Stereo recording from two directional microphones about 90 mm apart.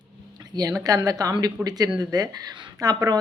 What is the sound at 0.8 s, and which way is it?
Speech, 45° right (ahead or behind).